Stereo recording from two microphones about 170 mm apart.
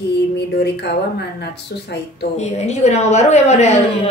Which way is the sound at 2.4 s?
40° left (ahead or behind).